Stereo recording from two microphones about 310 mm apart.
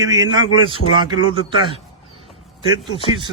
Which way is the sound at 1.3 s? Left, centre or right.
Centre.